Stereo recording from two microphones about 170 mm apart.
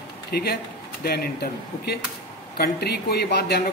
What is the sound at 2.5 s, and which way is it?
Speech, 70° left (ahead or behind).